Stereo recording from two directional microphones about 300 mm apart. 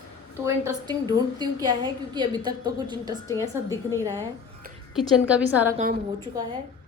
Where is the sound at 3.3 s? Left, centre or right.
Centre.